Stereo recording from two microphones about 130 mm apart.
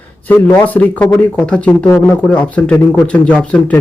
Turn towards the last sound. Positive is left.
turn(degrees=10)  # may be behind; listen again after turning